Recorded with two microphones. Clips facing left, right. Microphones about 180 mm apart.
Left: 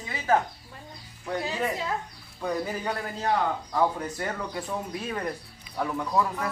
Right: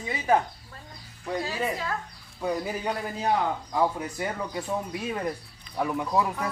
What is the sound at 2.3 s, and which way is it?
Speech, 5° right (ahead or behind).